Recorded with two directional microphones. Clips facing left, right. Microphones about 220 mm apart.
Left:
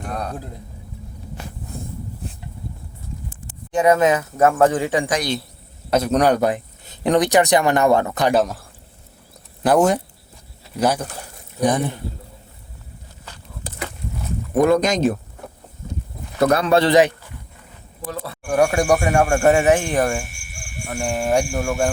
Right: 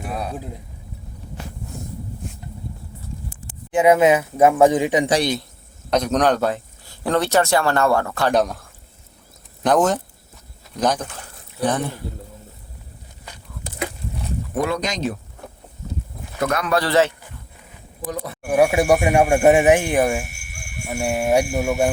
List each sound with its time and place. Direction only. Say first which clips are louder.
0.0 s a man's voice: even; 5° right (ahead or behind)
3.7 s speech: right 1 dB; 10° right (ahead or behind)
5.0 s a man's voice: right 4 dB; 30° right (ahead or behind)
5.9 s a man's voice: left 1 dB; 5° left (ahead or behind)
8.3 s speech: even; 5° left (ahead or behind)
9.6 s a man's voice: left 2 dB; 10° left (ahead or behind)
13.8 s a sound: right 5 dB; 10° right (ahead or behind)
14.5 s speech: left 8 dB; 45° left (ahead or behind)
16.4 s speech: left 5 dB; 30° left (ahead or behind); by 17.2 s 15° left (ahead or behind)
18.0 s speech: right 1 dB; 20° right (ahead or behind)
18.5 s speech: right 1 dB; 5° right (ahead or behind)